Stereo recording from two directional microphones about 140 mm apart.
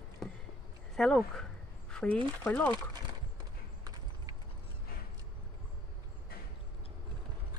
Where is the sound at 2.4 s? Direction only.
10° left (ahead or behind).